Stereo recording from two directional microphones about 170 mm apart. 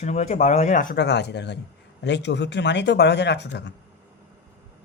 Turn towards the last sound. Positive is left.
turn(degrees=90)